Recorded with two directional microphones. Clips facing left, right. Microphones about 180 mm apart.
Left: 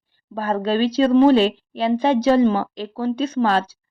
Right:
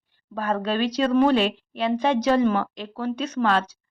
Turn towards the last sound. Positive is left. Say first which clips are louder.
# left 3 dB
turn(degrees=35)  # may be behind; listen again after turning